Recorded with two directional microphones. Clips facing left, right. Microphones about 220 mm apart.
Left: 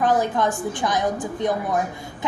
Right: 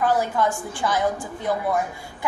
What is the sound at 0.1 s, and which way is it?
Speech, 15° left (ahead or behind).